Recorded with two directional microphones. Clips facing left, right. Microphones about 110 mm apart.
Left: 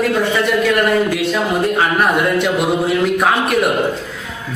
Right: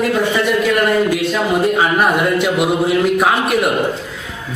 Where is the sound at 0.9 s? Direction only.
5° right (ahead or behind).